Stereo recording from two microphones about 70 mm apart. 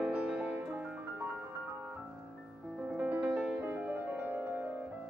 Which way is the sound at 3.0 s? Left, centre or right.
Centre.